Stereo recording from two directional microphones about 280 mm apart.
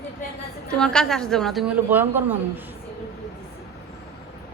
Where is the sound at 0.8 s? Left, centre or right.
Centre.